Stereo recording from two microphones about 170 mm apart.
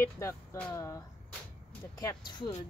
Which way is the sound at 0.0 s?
15° left (ahead or behind).